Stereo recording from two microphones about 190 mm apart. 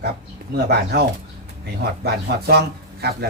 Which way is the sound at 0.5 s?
60° right (ahead or behind).